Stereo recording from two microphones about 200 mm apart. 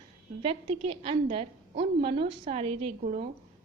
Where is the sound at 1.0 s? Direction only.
30° right (ahead or behind).